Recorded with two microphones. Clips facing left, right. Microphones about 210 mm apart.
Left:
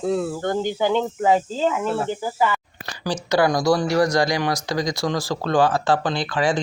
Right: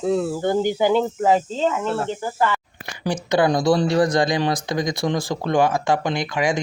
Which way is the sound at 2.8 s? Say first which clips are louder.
Right 1 dB; 20° right (ahead or behind).